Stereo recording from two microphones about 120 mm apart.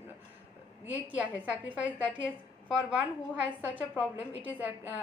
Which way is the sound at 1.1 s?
10° right (ahead or behind).